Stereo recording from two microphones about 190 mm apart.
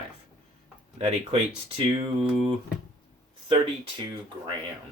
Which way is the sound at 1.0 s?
30° right (ahead or behind).